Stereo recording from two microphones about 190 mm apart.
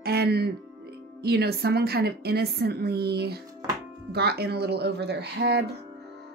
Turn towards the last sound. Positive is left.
turn(degrees=-60)  # may be behind; listen again after turning